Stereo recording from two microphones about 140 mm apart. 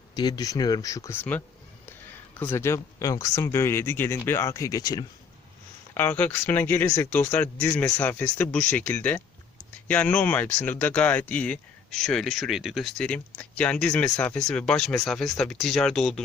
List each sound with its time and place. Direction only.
0.1 s speech: 30° left (ahead or behind)
2.4 s speech: 15° left (ahead or behind)
5.9 s speech: 15° left (ahead or behind)